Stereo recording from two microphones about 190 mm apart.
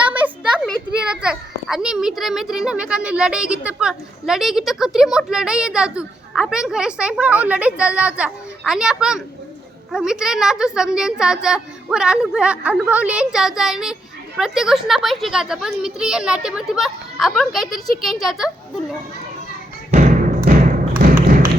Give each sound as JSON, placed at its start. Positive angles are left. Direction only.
{"t": 0.6, "sound": "a child's voice", "side_deg": 0}
{"t": 19.9, "sound": "music", "side_deg": -45}